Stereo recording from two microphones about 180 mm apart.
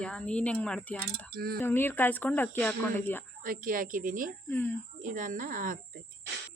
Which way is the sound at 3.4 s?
50° right (ahead or behind).